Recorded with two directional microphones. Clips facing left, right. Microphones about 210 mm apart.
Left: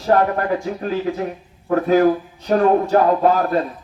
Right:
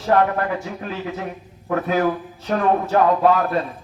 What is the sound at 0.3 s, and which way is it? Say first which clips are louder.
A man's voice: left 3 dB; 35° left (ahead or behind).